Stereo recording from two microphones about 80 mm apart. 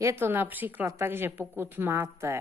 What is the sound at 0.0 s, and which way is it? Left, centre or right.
A woman's voice, right.